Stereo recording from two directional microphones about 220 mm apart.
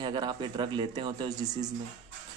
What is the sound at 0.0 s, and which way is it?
Speech, 20° right (ahead or behind).